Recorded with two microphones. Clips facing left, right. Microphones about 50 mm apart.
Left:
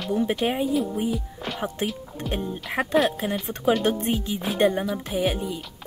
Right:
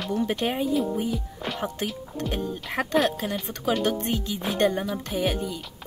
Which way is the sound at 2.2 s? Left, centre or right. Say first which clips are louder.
Right 2 dB; centre.